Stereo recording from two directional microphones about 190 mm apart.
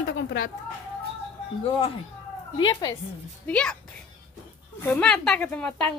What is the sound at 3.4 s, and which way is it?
Speech, 5° left (ahead or behind).